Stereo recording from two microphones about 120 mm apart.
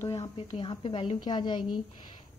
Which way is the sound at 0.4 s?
45° left (ahead or behind).